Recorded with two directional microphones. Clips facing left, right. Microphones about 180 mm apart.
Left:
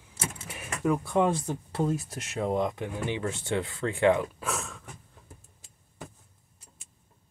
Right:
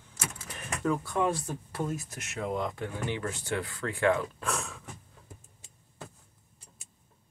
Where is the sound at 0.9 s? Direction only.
20° left (ahead or behind).